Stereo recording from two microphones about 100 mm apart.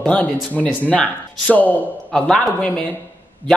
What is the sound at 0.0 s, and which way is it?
A man's voice, 15° left (ahead or behind).